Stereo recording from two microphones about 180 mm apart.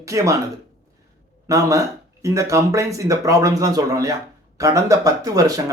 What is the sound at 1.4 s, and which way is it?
Speech, 20° right (ahead or behind).